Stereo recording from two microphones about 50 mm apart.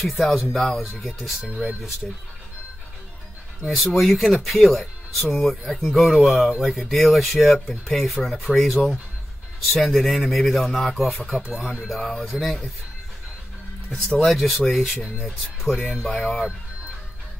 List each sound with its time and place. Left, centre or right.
0.0 s speech: centre
3.6 s speech: centre
13.8 s speech: centre